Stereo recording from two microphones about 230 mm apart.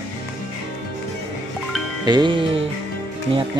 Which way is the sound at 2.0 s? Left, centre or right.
Centre.